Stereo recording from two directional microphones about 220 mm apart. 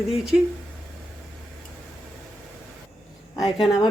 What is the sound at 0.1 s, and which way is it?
Speech, centre (ahead or behind).